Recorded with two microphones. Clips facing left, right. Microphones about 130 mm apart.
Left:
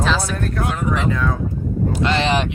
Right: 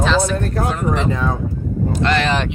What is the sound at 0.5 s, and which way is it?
Speech, 35° right (ahead or behind).